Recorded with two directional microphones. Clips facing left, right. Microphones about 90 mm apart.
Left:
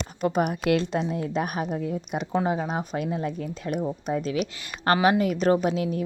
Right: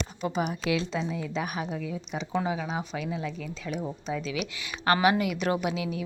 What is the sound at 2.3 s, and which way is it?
A woman's voice, 40° left (ahead or behind).